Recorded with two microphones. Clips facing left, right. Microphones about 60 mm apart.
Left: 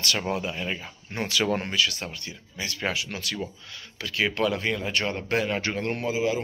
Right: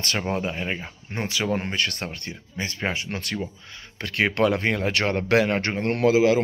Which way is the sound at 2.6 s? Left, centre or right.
Right.